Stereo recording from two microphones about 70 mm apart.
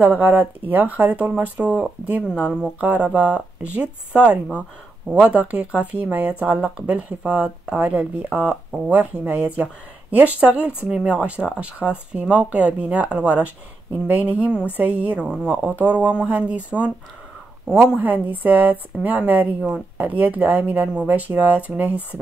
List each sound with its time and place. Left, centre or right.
0.0 s speech: right
7.9 s speech: right
8.3 s speech: centre
15.1 s speech: centre
17.9 s speech: right